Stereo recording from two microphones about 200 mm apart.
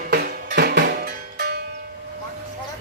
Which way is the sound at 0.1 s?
50° right (ahead or behind).